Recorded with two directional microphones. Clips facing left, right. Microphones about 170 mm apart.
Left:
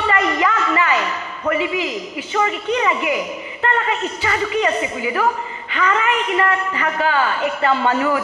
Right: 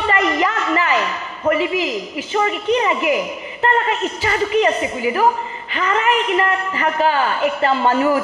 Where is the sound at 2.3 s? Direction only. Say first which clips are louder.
Right 2 dB; 35° right (ahead or behind).